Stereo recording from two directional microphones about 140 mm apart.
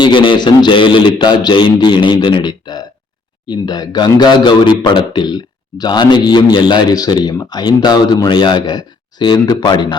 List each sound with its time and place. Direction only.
0.0 s speech: 35° left (ahead or behind)